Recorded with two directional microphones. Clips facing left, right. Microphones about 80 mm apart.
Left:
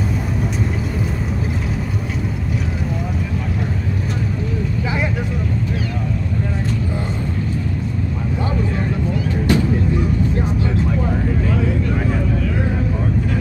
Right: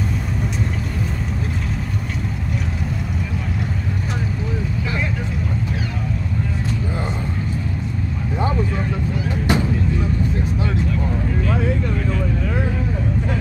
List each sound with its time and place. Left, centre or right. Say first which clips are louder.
9.5 s vehicle: left 2 dB; centre